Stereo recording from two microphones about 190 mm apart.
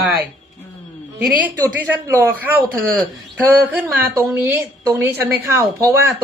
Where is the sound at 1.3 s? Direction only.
10° right (ahead or behind).